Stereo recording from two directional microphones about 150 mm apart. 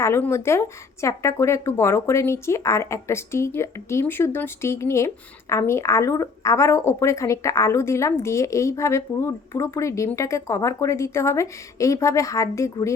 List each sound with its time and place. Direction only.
0.0 s speech: 15° left (ahead or behind)